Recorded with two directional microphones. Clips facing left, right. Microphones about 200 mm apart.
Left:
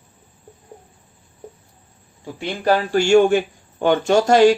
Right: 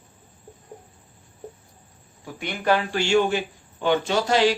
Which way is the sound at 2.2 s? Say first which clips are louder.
Left 4 dB; 30° left (ahead or behind).